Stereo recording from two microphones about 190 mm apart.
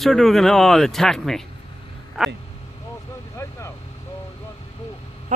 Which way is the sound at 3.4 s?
15° left (ahead or behind).